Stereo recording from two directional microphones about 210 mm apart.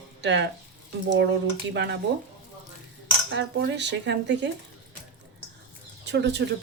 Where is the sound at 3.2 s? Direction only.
55° right (ahead or behind).